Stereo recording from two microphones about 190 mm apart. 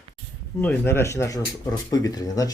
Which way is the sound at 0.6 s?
10° left (ahead or behind).